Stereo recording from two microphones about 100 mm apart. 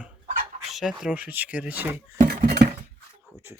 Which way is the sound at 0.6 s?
5° right (ahead or behind).